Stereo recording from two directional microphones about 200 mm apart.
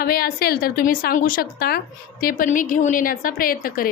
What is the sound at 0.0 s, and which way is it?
A woman's voice, 50° left (ahead or behind).